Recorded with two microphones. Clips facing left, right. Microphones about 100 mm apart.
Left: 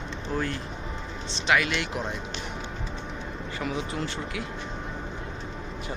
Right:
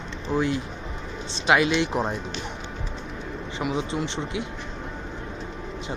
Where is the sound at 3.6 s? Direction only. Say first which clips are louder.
Right 4 dB; 25° right (ahead or behind).